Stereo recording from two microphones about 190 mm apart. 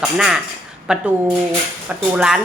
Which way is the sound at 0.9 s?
5° right (ahead or behind).